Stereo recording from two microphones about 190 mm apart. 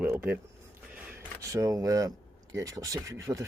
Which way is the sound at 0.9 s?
15° right (ahead or behind).